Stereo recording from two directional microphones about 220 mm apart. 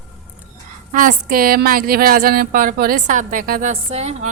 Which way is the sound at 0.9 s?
40° right (ahead or behind).